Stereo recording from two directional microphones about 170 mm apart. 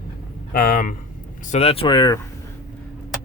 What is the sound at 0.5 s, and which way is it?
Speech, 60° left (ahead or behind).